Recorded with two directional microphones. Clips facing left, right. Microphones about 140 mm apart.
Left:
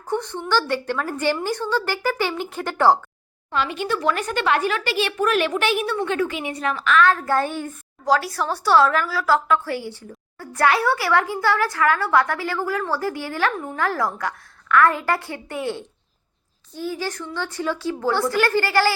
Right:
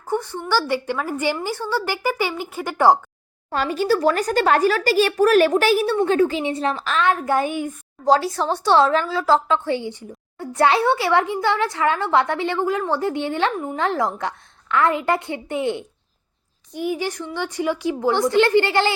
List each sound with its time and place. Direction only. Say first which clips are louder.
0.1 s a woman's voice: right 1 dB; 5° right (ahead or behind)
3.5 s a child's voice: right 4 dB; 40° right (ahead or behind)
7.0 s a woman's voice: right 2 dB; 20° right (ahead or behind)
8.0 s a woman's voice: right 3 dB; 25° right (ahead or behind)